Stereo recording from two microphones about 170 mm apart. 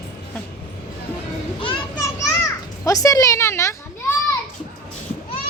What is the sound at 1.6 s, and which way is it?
Children playing, 30° left (ahead or behind).